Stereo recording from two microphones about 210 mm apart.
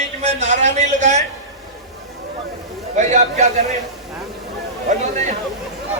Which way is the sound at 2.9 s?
35° right (ahead or behind).